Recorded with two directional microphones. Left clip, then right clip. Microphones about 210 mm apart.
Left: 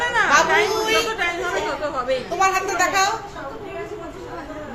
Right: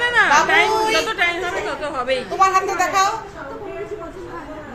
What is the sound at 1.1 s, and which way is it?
Chatter, 30° right (ahead or behind).